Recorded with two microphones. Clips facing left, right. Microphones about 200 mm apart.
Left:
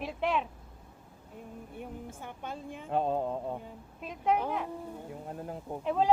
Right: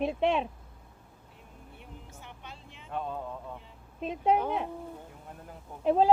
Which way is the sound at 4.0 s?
35° right (ahead or behind).